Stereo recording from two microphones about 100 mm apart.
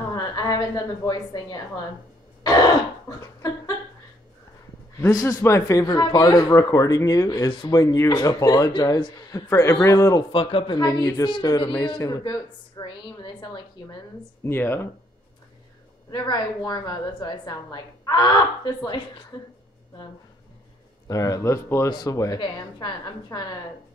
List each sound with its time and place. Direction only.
0.1 s a woman's voice: 40° left (ahead or behind)
2.4 s a sound: 40° left (ahead or behind)
5.1 s speech: 35° left (ahead or behind)
8.7 s a woman's voice: 50° left (ahead or behind)
9.5 s speech: 30° left (ahead or behind)
10.3 s a man's voice: 65° left (ahead or behind)
10.8 s a woman's voice: 40° left (ahead or behind)
14.4 s speech: 25° left (ahead or behind)
16.1 s a woman's voice: 45° left (ahead or behind)
21.1 s speech: 35° left (ahead or behind)
22.4 s a woman's voice: 45° left (ahead or behind)